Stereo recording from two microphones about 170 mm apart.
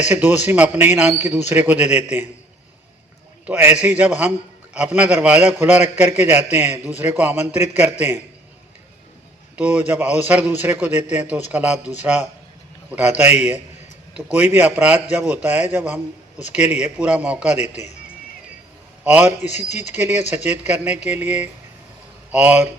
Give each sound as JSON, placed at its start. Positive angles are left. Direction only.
{"t": 0.1, "sound": "a man's voice", "side_deg": -10}
{"t": 3.4, "sound": "a man's voice", "side_deg": -10}
{"t": 9.6, "sound": "a man's voice", "side_deg": -10}
{"t": 17.6, "sound": "a man's voice", "side_deg": 40}
{"t": 19.0, "sound": "a man's voice", "side_deg": -10}